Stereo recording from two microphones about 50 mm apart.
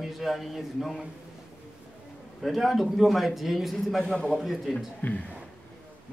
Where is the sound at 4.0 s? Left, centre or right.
Centre.